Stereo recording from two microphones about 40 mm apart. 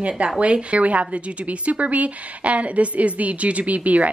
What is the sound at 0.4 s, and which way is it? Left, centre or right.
Speech, right.